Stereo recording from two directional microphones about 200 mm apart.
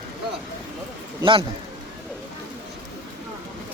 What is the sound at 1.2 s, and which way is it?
Speech, 25° right (ahead or behind).